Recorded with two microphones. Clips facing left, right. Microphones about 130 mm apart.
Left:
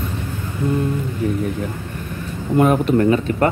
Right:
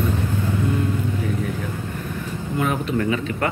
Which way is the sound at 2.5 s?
50° left (ahead or behind).